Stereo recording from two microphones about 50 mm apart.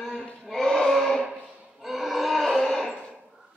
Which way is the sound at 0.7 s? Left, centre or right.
Centre.